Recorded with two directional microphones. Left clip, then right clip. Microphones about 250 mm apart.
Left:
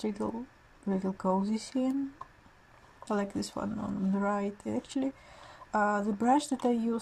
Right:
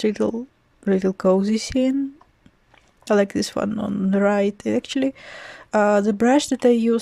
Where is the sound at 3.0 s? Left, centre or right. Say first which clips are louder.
Right 14 dB; right.